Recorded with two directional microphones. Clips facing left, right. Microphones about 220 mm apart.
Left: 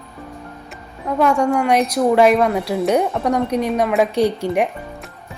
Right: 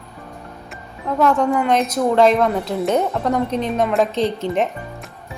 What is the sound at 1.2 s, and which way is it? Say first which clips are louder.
Speech: even; 10° left (ahead or behind).